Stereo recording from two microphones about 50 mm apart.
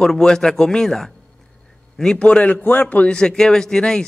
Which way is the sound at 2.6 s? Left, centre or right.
Left.